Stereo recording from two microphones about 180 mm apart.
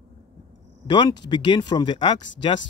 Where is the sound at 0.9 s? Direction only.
25° left (ahead or behind).